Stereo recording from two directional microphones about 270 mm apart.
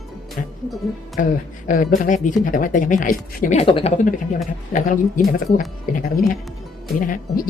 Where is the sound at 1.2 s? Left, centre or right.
Left.